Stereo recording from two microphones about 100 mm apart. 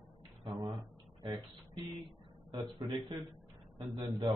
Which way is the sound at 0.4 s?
50° right (ahead or behind).